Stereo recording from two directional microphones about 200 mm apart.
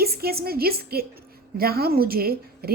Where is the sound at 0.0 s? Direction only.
50° right (ahead or behind).